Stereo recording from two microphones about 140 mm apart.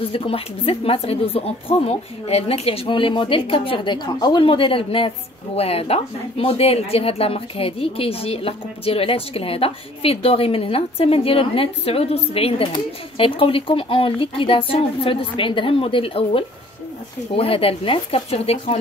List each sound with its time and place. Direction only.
0.0 s speech: 40° left (ahead or behind)